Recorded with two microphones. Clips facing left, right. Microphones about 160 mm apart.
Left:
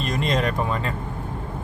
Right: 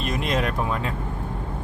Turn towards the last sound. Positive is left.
turn(degrees=-5)  # may be behind; listen again after turning